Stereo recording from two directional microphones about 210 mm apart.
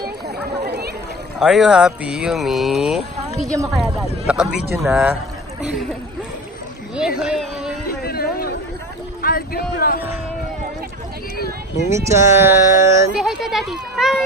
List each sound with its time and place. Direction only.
0.7 s a sound: 50° right (ahead or behind)
1.4 s speech: centre (ahead or behind)
7.2 s speech: 5° right (ahead or behind)
8.0 s a sound: 45° left (ahead or behind)
9.2 s speech: 45° left (ahead or behind)
11.9 s speech: 15° right (ahead or behind)
13.2 s speech: centre (ahead or behind)